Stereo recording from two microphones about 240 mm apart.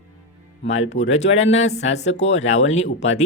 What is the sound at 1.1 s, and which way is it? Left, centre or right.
Speech, left.